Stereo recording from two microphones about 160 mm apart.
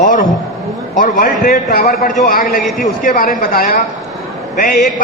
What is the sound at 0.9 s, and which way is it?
A man's voice, 55° left (ahead or behind).